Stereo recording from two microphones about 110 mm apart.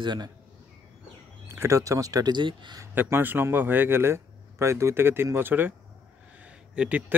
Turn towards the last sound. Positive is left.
turn(degrees=-10)  # may be behind; listen again after turning